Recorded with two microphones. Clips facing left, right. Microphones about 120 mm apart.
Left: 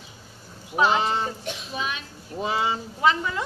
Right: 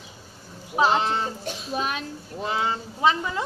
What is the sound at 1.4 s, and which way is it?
Speech, 40° right (ahead or behind).